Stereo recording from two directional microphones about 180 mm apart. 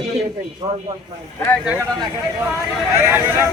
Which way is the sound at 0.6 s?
25° right (ahead or behind).